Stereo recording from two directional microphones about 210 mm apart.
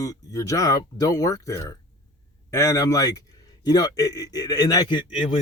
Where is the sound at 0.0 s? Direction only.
15° left (ahead or behind).